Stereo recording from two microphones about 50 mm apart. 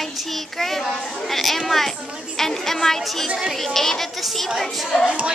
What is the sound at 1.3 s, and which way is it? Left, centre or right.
A woman's voice, centre.